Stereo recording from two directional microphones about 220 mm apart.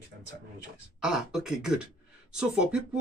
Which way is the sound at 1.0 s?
Centre (ahead or behind).